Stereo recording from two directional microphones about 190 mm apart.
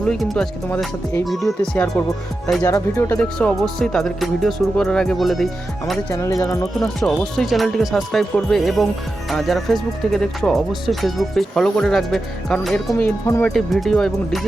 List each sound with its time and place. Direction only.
0.1 s speech: centre (ahead or behind)
6.1 s speech: 15° left (ahead or behind)
6.7 s speech: 5° left (ahead or behind)
13.5 s speech: centre (ahead or behind)